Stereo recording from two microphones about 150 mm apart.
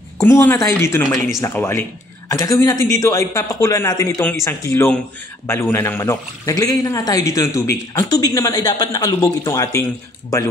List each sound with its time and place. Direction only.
0.2 s speech: 15° left (ahead or behind)